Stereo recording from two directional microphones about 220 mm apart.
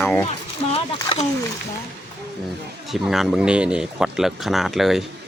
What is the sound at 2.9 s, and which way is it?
Speech, centre (ahead or behind).